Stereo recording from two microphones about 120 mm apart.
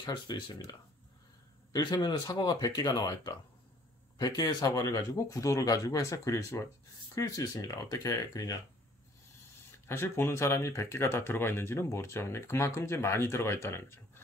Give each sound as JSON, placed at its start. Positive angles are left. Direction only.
{"t": 0.0, "sound": "speech", "side_deg": 35}
{"t": 9.8, "sound": "speech", "side_deg": 20}